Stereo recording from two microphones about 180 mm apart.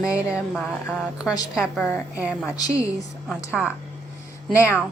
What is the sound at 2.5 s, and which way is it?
Speech, 20° left (ahead or behind).